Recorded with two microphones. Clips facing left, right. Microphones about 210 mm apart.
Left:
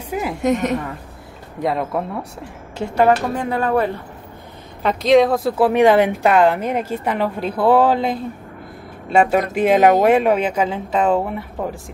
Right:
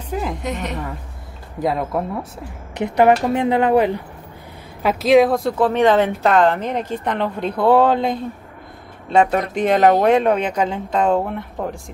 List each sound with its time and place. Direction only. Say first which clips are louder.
0.1 s a sound: left 1 dB; 5° left (ahead or behind)
0.4 s a woman's voice: left 8 dB; 45° left (ahead or behind)
1.6 s speech: even; centre (ahead or behind)
2.8 s speech: right 1 dB; 20° right (ahead or behind)
4.8 s a woman's voice: even; centre (ahead or behind)